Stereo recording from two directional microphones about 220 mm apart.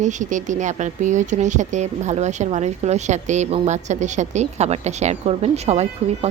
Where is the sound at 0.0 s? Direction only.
35° right (ahead or behind).